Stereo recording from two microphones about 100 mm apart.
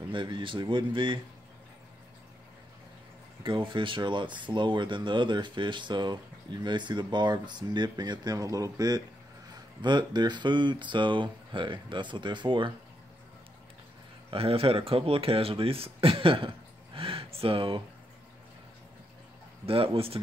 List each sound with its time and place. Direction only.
0.1 s speech: 55° right (ahead or behind)
3.4 s speech: 55° right (ahead or behind)
14.3 s speech: 70° right (ahead or behind)
19.6 s speech: 65° right (ahead or behind)